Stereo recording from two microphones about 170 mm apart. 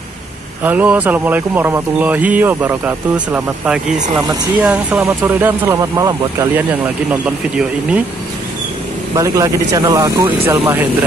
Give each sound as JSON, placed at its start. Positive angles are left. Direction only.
{"t": 0.7, "sound": "speech", "side_deg": -10}
{"t": 7.1, "sound": "speech", "side_deg": -5}
{"t": 9.1, "sound": "speech", "side_deg": -20}